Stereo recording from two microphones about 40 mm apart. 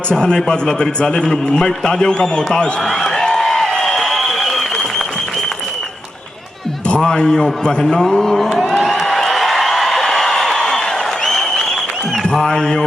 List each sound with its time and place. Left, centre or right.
0.1 s a man's voice: centre
2.8 s a man's voice: centre
3.2 s a sound: centre
4.5 s applause: centre
7.2 s a man's voice: centre
8.7 s a sound: centre
12.5 s music: centre